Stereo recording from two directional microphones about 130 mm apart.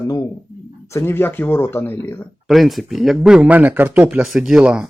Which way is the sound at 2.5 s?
Centre (ahead or behind).